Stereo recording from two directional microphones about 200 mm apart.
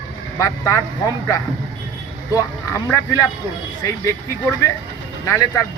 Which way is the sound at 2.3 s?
15° left (ahead or behind).